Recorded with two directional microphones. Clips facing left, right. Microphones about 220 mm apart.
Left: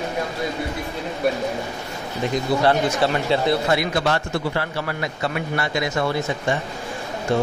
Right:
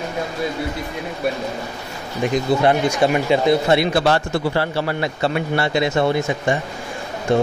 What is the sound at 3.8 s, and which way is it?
A man's voice, 30° right (ahead or behind).